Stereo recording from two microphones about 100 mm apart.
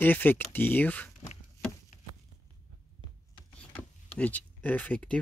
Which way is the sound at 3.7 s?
15° left (ahead or behind).